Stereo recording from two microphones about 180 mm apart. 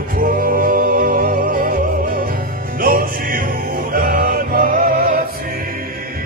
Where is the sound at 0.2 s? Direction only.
50° right (ahead or behind).